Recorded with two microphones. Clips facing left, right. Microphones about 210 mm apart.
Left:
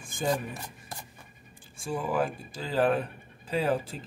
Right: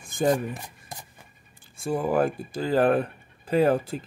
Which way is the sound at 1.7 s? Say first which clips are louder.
Right 5 dB; 60° right (ahead or behind).